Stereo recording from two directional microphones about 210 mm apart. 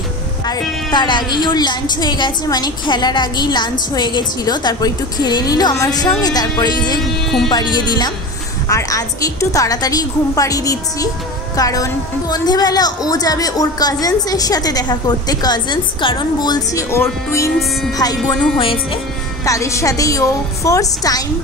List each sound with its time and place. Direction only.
0.5 s a woman's voice: 20° left (ahead or behind)
19.4 s a woman's voice: 15° left (ahead or behind)